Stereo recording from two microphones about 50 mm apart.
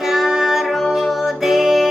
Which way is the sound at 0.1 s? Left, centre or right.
Centre.